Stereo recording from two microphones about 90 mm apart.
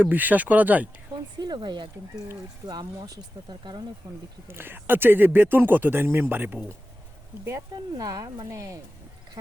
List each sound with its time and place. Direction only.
0.0 s speech: 20° right (ahead or behind)
1.4 s speech: 55° right (ahead or behind)
4.4 s speech: 25° right (ahead or behind)
7.9 s speech: 40° right (ahead or behind)